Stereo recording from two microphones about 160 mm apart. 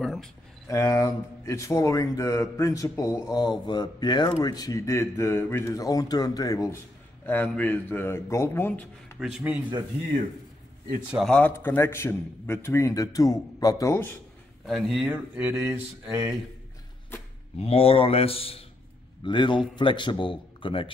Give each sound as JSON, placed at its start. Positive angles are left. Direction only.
{"t": 0.0, "sound": "a sound", "side_deg": 0}
{"t": 0.7, "sound": "a man's voice", "side_deg": 20}
{"t": 9.2, "sound": "speech", "side_deg": -5}
{"t": 11.1, "sound": "speech", "side_deg": 0}
{"t": 11.3, "sound": "a man's voice", "side_deg": 10}
{"t": 14.7, "sound": "speech", "side_deg": 0}
{"t": 17.6, "sound": "a man's voice", "side_deg": 40}